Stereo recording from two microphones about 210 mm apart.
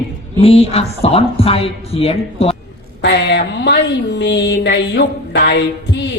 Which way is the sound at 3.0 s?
55° left (ahead or behind).